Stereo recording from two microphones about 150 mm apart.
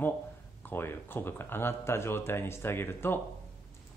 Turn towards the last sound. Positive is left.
turn(degrees=15)  # may be behind; listen again after turning